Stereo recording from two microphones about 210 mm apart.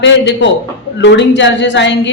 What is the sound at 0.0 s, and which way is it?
A woman's voice, 60° left (ahead or behind).